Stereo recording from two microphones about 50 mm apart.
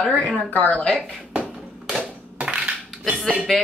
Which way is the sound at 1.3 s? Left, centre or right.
Right.